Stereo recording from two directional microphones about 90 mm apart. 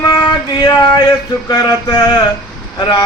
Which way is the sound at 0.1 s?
50° left (ahead or behind).